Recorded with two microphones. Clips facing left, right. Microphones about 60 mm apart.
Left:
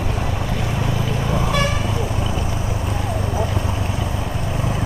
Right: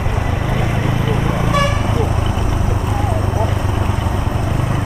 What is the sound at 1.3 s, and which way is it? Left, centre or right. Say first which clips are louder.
Toot: right 2 dB; centre.